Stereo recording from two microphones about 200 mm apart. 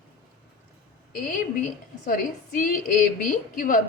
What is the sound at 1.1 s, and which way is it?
A woman's voice, 45° left (ahead or behind).